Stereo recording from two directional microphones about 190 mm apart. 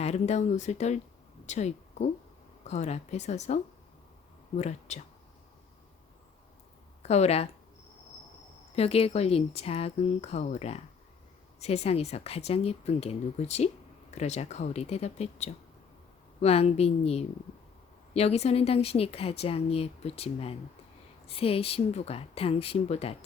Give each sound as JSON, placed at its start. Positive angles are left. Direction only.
{"t": 0.0, "sound": "speech", "side_deg": 35}
{"t": 7.0, "sound": "speech", "side_deg": 35}
{"t": 8.7, "sound": "speech", "side_deg": 30}